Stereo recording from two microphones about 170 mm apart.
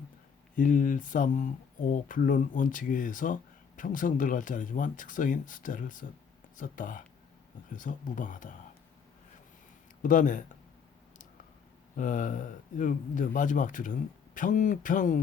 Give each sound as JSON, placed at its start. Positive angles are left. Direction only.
{"t": 0.5, "sound": "a man's voice", "side_deg": 50}
{"t": 10.0, "sound": "a man's voice", "side_deg": 50}
{"t": 11.9, "sound": "a man's voice", "side_deg": 50}